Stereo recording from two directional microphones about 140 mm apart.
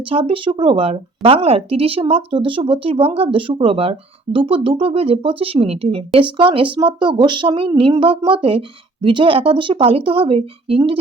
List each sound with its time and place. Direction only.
0.0 s speech: 40° right (ahead or behind)